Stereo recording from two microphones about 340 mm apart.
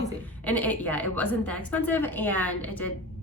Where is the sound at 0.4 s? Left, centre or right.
Centre.